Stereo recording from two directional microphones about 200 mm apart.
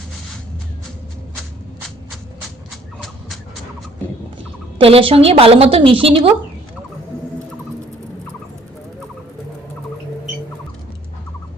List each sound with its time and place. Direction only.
4.8 s a woman's voice: 30° right (ahead or behind)